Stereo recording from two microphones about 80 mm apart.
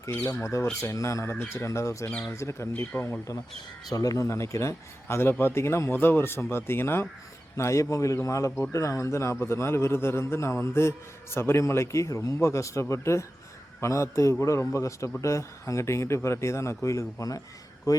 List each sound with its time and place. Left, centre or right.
0.1 s a man's voice: left
3.8 s a man's voice: left